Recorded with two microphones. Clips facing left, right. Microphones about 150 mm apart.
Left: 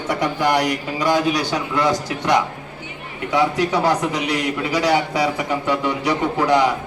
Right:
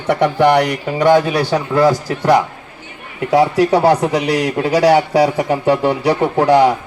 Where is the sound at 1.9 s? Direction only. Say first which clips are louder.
Right 5 dB; 30° right (ahead or behind).